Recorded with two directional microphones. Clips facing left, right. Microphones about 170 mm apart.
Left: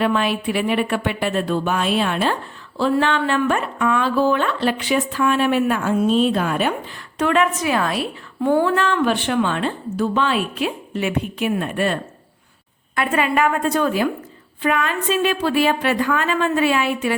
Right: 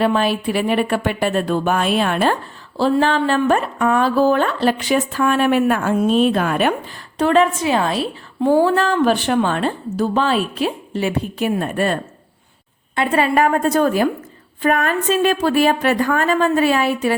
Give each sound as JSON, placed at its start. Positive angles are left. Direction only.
{"t": 0.0, "sound": "speech", "side_deg": -35}
{"t": 2.7, "sound": "speech", "side_deg": -35}
{"t": 7.2, "sound": "a woman's voice", "side_deg": -30}
{"t": 13.0, "sound": "a woman's voice", "side_deg": -35}